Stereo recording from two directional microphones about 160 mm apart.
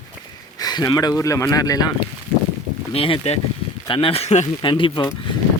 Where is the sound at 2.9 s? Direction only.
35° left (ahead or behind).